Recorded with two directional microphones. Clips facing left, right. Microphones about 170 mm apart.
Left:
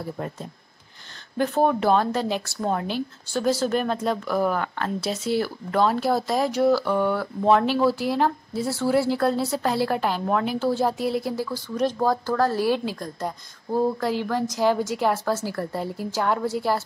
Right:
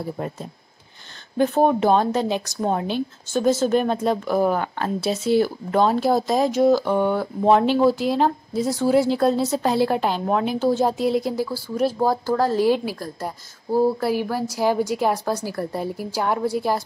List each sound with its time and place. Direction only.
1.4 s speech: 20° right (ahead or behind)